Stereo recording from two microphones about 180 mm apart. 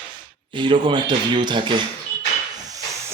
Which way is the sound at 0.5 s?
25° right (ahead or behind).